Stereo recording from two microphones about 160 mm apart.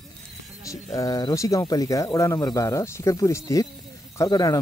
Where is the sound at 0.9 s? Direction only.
20° left (ahead or behind).